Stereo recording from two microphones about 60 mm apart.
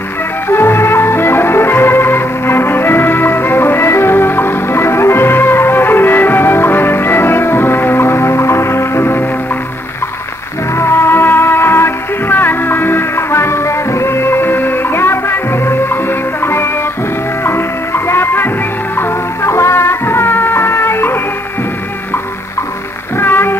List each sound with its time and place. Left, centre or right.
0.5 s music: left
10.7 s music: left
23.1 s music: left